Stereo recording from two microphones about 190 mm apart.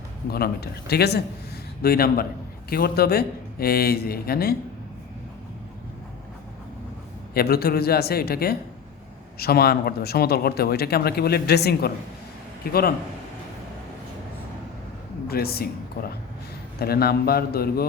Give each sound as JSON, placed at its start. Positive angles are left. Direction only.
{"t": 0.3, "sound": "speech", "side_deg": 55}
{"t": 7.3, "sound": "speech", "side_deg": 55}
{"t": 15.3, "sound": "speech", "side_deg": 55}